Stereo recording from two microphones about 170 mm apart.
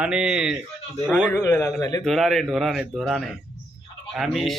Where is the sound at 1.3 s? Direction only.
15° left (ahead or behind).